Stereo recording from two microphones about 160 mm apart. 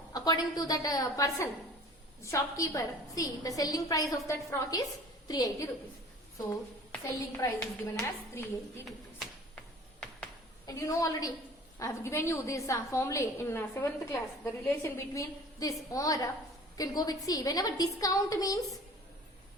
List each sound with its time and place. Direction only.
0.1 s a woman's voice: 25° left (ahead or behind)
7.1 s a woman's voice: 20° left (ahead or behind)
10.7 s a woman's voice: 20° left (ahead or behind)